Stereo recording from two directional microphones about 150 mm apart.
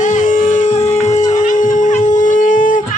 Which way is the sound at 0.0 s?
55° left (ahead or behind).